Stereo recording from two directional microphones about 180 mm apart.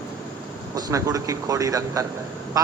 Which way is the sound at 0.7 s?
20° right (ahead or behind).